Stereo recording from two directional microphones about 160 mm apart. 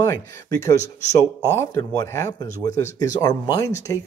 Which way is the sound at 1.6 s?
15° left (ahead or behind).